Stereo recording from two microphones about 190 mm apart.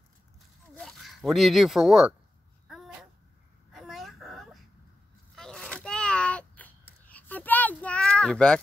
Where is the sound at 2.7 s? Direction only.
Centre (ahead or behind).